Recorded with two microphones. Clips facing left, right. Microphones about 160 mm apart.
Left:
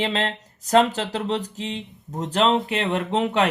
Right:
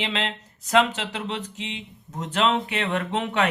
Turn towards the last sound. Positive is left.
turn(degrees=30)  # may be behind; listen again after turning